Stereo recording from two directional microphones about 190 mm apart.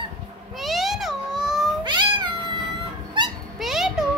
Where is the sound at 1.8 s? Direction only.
25° right (ahead or behind).